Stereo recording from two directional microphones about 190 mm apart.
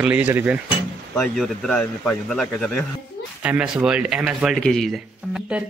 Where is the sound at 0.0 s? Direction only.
10° right (ahead or behind).